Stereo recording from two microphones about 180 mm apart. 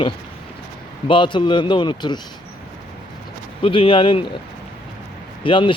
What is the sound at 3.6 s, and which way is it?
Speech, 30° left (ahead or behind).